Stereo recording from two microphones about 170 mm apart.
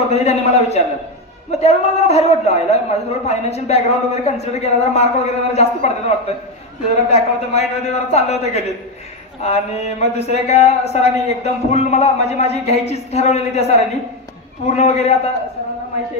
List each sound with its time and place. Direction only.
0.1 s a man's voice: 40° left (ahead or behind)